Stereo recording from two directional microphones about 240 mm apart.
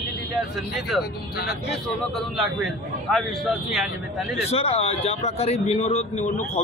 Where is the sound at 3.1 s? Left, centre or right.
Centre.